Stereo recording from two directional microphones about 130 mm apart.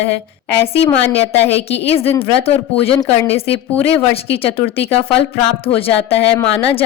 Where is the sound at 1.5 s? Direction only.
50° left (ahead or behind).